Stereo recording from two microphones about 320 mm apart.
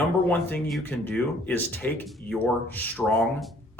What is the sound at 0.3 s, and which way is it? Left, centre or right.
Speech, centre.